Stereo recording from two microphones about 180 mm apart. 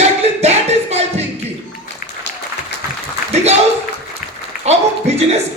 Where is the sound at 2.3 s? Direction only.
75° left (ahead or behind).